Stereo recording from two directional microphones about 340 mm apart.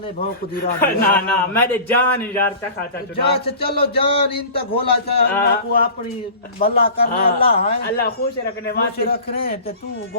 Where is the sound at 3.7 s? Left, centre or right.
Centre.